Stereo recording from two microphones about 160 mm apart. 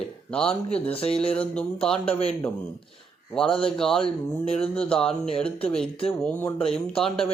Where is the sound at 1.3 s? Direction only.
10° left (ahead or behind).